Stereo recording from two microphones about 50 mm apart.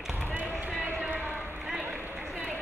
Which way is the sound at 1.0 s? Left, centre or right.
Right.